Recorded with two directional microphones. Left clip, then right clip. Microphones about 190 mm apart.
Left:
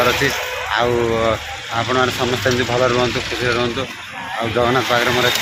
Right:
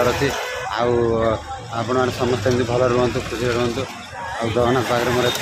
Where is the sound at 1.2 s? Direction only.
Centre (ahead or behind).